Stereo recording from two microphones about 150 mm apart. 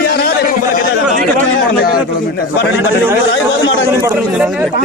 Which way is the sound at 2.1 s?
90° left.